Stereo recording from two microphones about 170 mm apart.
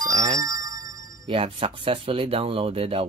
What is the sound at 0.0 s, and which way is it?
Speech, 20° right (ahead or behind).